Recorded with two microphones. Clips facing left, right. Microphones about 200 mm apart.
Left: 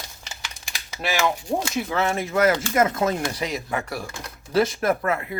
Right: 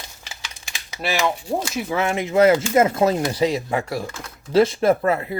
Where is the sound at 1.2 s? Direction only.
Centre (ahead or behind).